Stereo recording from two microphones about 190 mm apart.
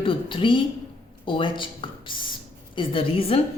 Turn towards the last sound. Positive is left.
turn(degrees=30)  # may be behind; listen again after turning